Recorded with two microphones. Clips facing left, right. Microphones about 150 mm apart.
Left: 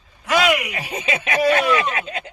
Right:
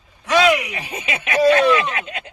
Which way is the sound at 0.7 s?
30° left (ahead or behind).